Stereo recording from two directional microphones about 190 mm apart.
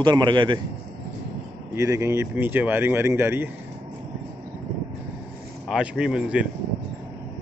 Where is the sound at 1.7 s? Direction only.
15° right (ahead or behind).